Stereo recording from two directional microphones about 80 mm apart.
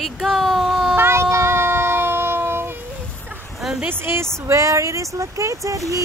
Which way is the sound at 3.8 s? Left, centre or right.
Right.